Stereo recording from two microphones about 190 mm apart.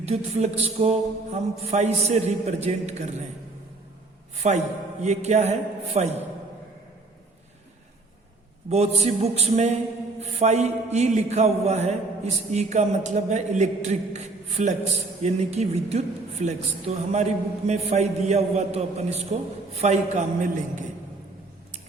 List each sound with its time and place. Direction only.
0.0 s a woman's voice: 35° right (ahead or behind)
4.4 s a woman's voice: 35° right (ahead or behind)
8.7 s a woman's voice: 35° right (ahead or behind)